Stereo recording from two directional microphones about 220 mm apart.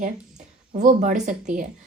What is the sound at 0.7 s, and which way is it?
Speech, 35° right (ahead or behind).